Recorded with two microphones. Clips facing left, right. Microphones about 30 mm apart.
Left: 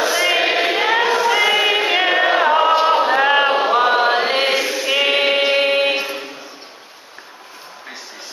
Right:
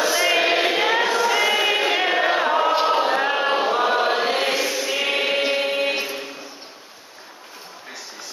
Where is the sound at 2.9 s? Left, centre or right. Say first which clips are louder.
Left 5 dB; centre.